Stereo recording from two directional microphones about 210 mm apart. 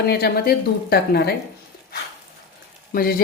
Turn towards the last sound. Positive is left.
turn(degrees=45)  # may be behind; listen again after turning